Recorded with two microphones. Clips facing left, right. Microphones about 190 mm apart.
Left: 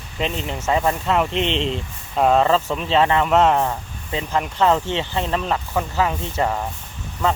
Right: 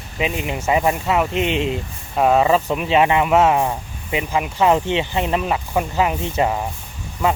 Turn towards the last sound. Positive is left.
turn(degrees=-10)  # may be behind; listen again after turning